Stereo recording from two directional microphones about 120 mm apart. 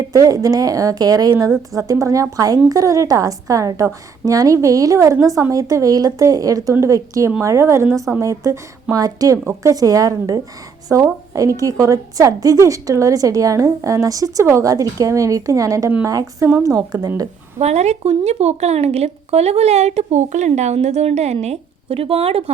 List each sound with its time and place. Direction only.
0.1 s a woman's voice: 30° right (ahead or behind)
17.6 s a woman's voice: 65° right (ahead or behind)